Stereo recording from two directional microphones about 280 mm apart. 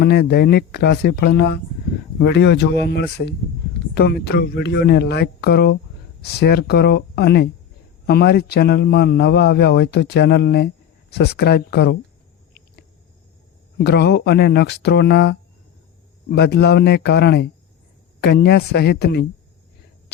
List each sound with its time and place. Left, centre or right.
0.0 s a man's voice: left
13.7 s a man's voice: left